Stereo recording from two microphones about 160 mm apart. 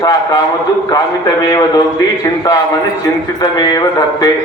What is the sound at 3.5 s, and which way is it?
Speech, 25° left (ahead or behind).